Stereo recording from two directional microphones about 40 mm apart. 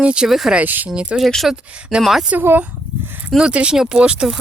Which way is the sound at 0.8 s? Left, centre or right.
Right.